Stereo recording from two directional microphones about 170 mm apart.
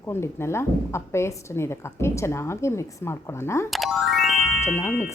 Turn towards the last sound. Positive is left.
turn(degrees=15)  # may be behind; listen again after turning